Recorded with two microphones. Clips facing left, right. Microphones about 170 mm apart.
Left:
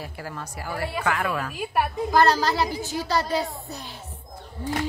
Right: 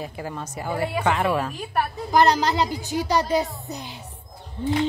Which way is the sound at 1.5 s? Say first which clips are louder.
Left 1 dB; 10° left (ahead or behind).